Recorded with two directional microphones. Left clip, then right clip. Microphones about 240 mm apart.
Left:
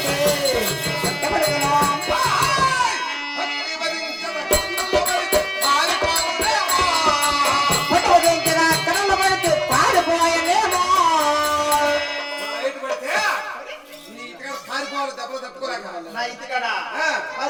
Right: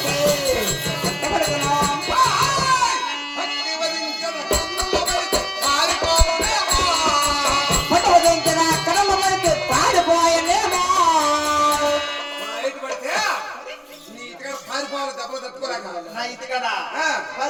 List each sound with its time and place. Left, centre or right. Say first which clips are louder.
0.0 s music: even; right